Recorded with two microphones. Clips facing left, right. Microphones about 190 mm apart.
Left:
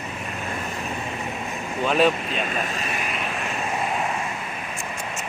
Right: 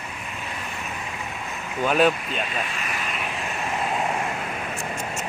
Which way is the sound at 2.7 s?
35° left (ahead or behind).